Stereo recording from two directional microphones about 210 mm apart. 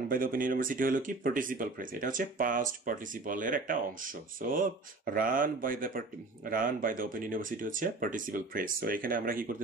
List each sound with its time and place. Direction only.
0.1 s speech: 40° right (ahead or behind)